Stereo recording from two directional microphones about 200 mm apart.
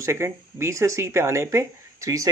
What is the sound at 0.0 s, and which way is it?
A man's voice, 15° right (ahead or behind).